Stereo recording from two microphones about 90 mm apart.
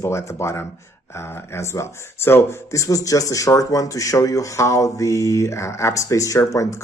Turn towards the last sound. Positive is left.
turn(degrees=35)  # may be behind; listen again after turning